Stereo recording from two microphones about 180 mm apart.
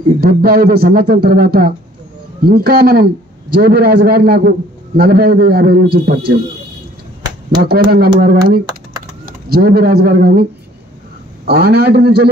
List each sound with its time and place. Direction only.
0.2 s a man's voice: 55° right (ahead or behind)
7.2 s a sound: 25° right (ahead or behind)
8.2 s a man's voice: 55° right (ahead or behind)
11.4 s a man's voice: 60° right (ahead or behind)